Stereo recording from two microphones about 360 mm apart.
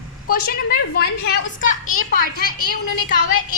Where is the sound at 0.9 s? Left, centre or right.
Left.